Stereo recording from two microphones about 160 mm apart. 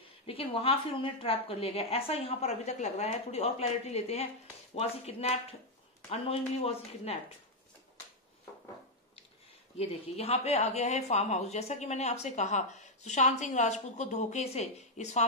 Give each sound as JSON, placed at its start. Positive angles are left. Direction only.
{"t": 0.3, "sound": "a woman's voice", "side_deg": 35}
{"t": 9.8, "sound": "speech", "side_deg": 40}